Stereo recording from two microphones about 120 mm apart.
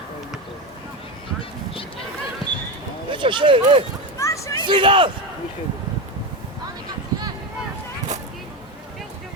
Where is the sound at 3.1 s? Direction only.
45° right (ahead or behind).